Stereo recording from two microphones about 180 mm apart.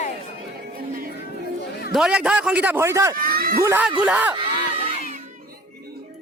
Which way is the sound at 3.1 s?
55° right (ahead or behind).